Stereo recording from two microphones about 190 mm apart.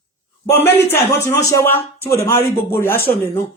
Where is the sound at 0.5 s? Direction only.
10° left (ahead or behind).